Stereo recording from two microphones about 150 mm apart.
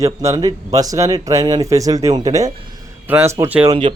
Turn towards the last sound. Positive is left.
turn(degrees=-35)  # may be behind; listen again after turning